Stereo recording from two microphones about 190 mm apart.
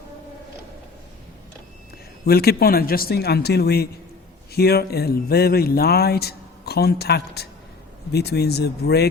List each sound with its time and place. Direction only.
2.2 s speech: 55° left (ahead or behind)